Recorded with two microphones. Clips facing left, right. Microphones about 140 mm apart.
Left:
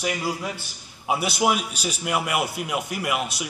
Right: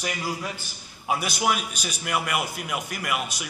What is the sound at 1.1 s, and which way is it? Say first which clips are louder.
Speech: left 3 dB; 30° left (ahead or behind).